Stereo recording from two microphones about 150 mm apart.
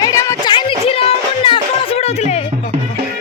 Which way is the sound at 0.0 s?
20° left (ahead or behind).